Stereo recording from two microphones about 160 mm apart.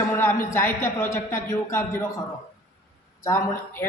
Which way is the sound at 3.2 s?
20° left (ahead or behind).